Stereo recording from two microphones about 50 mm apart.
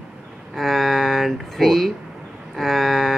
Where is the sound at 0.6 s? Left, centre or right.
Centre.